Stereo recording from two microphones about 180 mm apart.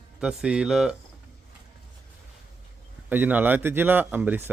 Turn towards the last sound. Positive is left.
turn(degrees=-10)  # may be behind; listen again after turning